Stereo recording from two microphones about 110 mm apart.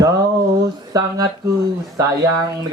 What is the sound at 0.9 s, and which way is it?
Speech, 35° right (ahead or behind).